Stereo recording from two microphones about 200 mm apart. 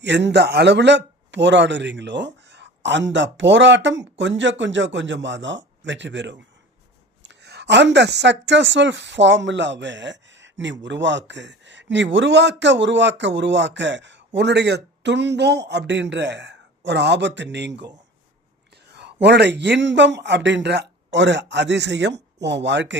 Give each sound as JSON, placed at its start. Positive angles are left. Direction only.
{"t": 0.0, "sound": "speech", "side_deg": -60}
{"t": 18.9, "sound": "speech", "side_deg": -60}